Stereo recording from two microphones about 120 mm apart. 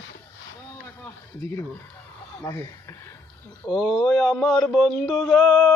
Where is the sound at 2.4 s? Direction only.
20° left (ahead or behind).